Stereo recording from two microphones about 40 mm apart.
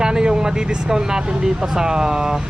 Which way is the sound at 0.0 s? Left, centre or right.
Centre.